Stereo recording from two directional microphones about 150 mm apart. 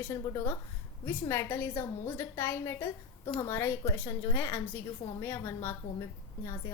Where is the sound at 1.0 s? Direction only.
15° left (ahead or behind).